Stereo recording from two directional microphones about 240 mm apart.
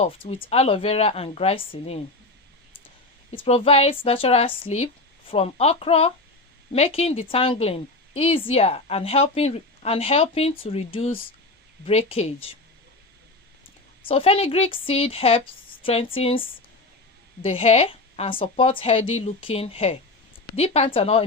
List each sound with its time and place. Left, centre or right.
0.0 s a woman's voice: left
3.3 s a woman's voice: left
14.1 s a woman's voice: left
17.4 s a woman's voice: left